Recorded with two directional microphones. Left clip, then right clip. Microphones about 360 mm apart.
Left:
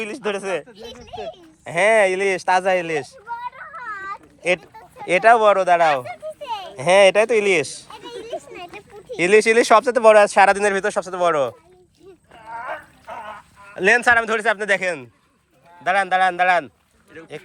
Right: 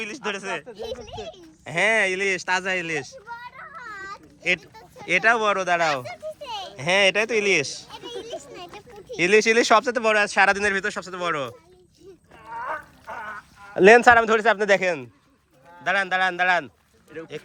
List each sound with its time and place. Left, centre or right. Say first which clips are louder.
0.0 s speech: left 4 dB; centre
0.7 s speech: right 5 dB; right
1.6 s speech: left 5 dB; centre
3.5 s a sound: left 6 dB; centre
4.4 s speech: left 3 dB; centre
4.7 s a sound: left 5 dB; centre
5.0 s speech: left 6 dB; centre
6.1 s a sound: left 4 dB; centre
6.7 s speech: left 6 dB; centre
8.2 s a sound: left 4 dB; centre
9.1 s speech: left 3 dB; centre
13.7 s a man's voice: right 2 dB; right